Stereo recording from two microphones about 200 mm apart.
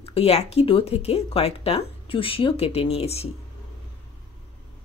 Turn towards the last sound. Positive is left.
turn(degrees=30)  # may be behind; listen again after turning